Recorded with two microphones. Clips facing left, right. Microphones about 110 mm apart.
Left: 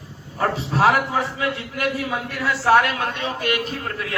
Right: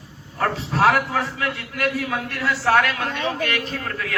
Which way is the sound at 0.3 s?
5° left (ahead or behind).